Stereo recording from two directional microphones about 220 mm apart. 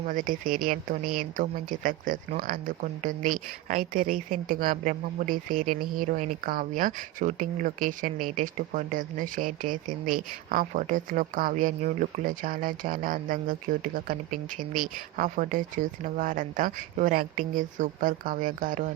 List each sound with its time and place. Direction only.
0.0 s speech: 40° right (ahead or behind)
5.6 s speech: 90° right
6.0 s speech: 35° right (ahead or behind)